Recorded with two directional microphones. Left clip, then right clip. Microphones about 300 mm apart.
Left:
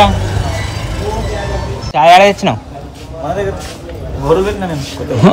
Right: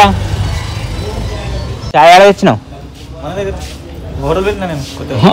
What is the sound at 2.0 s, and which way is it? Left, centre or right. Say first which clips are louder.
Speech: right 2 dB; right.